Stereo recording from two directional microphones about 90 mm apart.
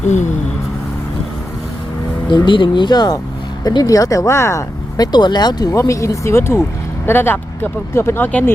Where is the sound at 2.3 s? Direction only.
60° left (ahead or behind); by 4.6 s 30° left (ahead or behind).